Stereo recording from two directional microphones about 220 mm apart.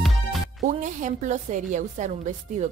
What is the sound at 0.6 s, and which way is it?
A woman's voice, 35° right (ahead or behind).